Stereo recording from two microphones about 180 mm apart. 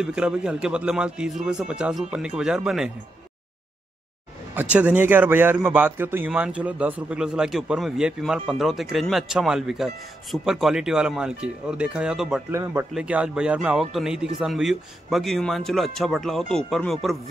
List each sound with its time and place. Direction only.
0.0 s a man's voice: 5° right (ahead or behind)
4.6 s a man's voice: 10° right (ahead or behind)
12.4 s a man's voice: 15° right (ahead or behind); by 17.2 s centre (ahead or behind)